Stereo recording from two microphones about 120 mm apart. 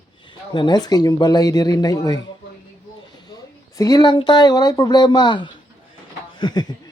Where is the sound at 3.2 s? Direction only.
30° left (ahead or behind).